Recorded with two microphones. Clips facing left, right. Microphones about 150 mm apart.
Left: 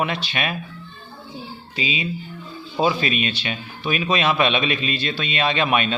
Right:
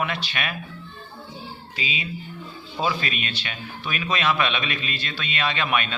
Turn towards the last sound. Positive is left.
turn(degrees=25)  # may be behind; listen again after turning